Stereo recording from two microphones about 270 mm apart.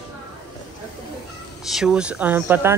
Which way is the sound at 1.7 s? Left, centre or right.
Centre.